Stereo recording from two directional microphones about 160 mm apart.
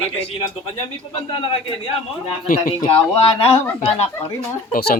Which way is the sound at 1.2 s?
30° left (ahead or behind).